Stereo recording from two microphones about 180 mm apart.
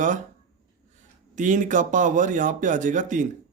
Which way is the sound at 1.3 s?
45° right (ahead or behind).